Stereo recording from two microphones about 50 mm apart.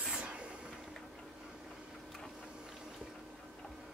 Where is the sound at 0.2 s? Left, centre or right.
Right.